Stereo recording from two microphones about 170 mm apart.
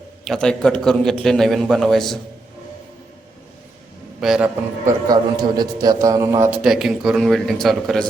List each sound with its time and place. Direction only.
0.3 s speech: 5° left (ahead or behind)
4.2 s a man's voice: 5° right (ahead or behind)
5.0 s a man's voice: 25° right (ahead or behind)
6.6 s speech: 5° right (ahead or behind)